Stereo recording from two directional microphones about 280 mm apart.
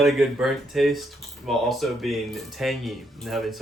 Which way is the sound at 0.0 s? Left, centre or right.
Centre.